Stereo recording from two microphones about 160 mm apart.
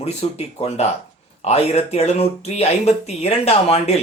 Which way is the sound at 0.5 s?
40° left (ahead or behind).